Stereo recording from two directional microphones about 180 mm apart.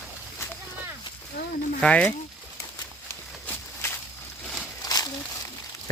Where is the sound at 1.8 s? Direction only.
5° left (ahead or behind).